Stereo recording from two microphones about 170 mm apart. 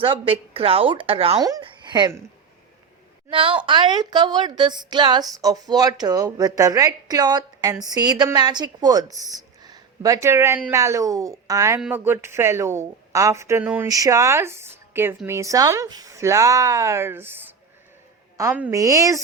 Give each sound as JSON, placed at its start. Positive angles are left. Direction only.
{"t": 0.0, "sound": "a woman's voice", "side_deg": -30}
{"t": 1.4, "sound": "speech", "side_deg": -20}
{"t": 3.2, "sound": "a woman's voice", "side_deg": -30}